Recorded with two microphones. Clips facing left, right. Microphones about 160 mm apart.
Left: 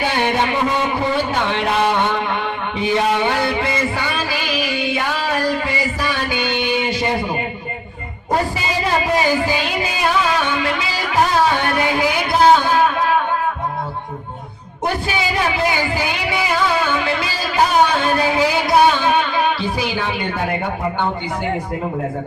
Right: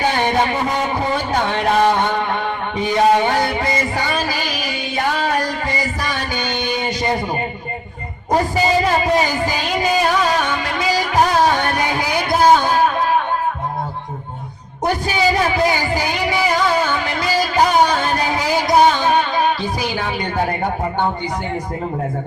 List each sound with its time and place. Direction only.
0.0 s a sound: 40° right (ahead or behind)
1.3 s speech: 40° right (ahead or behind)
2.7 s music: 40° right (ahead or behind)
9.8 s music: 40° right (ahead or behind)
15.0 s music: 40° right (ahead or behind)